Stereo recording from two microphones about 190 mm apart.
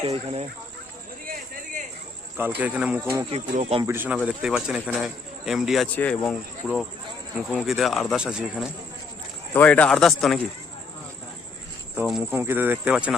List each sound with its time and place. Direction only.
0.0 s speech: 30° right (ahead or behind)
2.6 s speech: 5° right (ahead or behind)
3.5 s speech: 35° right (ahead or behind)
3.8 s a man's voice: 10° right (ahead or behind)
9.5 s a man's voice: 10° left (ahead or behind)
11.9 s speech: 5° right (ahead or behind)